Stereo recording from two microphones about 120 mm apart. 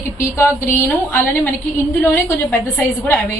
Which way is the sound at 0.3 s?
25° left (ahead or behind).